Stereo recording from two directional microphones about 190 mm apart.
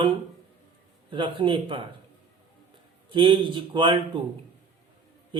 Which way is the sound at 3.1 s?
25° right (ahead or behind).